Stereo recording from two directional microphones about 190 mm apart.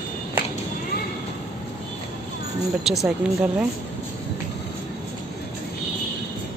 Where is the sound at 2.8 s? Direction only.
Centre (ahead or behind).